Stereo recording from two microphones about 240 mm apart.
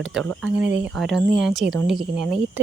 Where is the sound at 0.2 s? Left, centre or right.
Centre.